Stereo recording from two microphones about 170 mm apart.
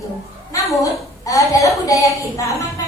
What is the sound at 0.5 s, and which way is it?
A woman's voice, 20° left (ahead or behind).